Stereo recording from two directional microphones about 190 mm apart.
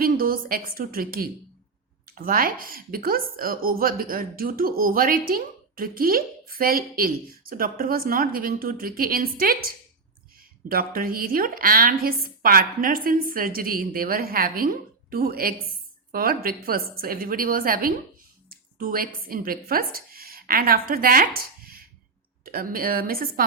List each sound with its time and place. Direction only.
0.0 s speech: 50° right (ahead or behind)
10.7 s speech: 50° right (ahead or behind)